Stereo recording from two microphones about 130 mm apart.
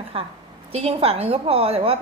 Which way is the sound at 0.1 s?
45° right (ahead or behind).